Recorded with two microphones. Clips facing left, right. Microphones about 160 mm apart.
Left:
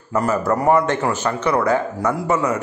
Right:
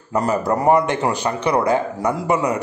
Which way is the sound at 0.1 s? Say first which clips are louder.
Even; 20° right (ahead or behind).